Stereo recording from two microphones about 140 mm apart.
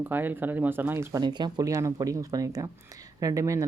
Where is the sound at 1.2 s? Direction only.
30° right (ahead or behind).